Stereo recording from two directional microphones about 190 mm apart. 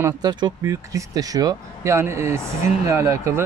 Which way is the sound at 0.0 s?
20° right (ahead or behind).